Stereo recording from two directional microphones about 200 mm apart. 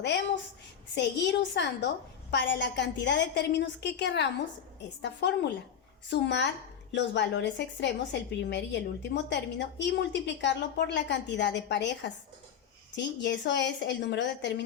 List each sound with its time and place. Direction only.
0.9 s a woman's voice: 60° left (ahead or behind)